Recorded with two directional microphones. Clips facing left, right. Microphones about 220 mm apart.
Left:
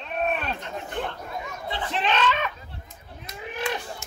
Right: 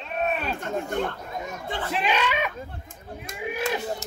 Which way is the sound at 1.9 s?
10° right (ahead or behind).